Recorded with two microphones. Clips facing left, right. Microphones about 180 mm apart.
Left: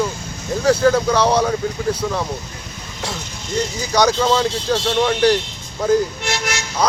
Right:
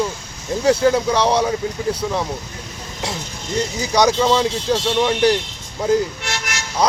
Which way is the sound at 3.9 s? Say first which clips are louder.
Right 1 dB; 15° right (ahead or behind).